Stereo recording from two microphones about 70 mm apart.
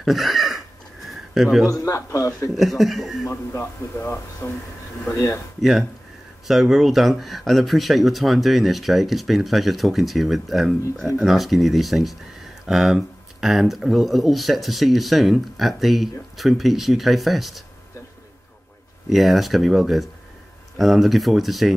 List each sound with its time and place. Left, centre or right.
0.0 s a sound: centre
1.7 s a man's voice: left
2.5 s speech: centre
3.3 s a man's voice: left
5.6 s speech: centre
19.0 s speech: centre